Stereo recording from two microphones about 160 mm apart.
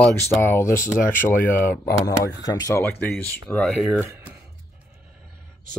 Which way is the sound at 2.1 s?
25° left (ahead or behind).